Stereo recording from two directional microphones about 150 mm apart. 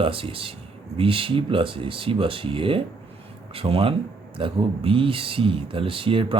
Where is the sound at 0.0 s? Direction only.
35° right (ahead or behind).